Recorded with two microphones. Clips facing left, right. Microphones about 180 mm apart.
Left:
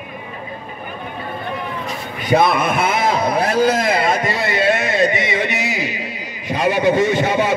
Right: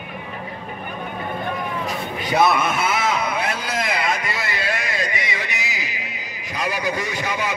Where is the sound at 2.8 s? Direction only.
30° left (ahead or behind).